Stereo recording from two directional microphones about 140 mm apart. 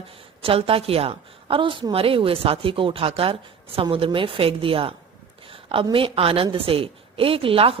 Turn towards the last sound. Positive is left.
turn(degrees=-40)  # may be behind; listen again after turning